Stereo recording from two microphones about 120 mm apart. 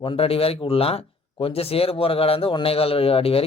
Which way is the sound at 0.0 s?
50° left (ahead or behind).